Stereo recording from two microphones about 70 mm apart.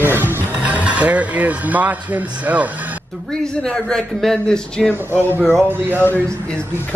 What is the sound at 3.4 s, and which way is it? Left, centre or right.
A man's voice, centre.